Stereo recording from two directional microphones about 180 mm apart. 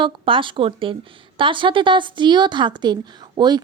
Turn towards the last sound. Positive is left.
turn(degrees=-25)  # may be behind; listen again after turning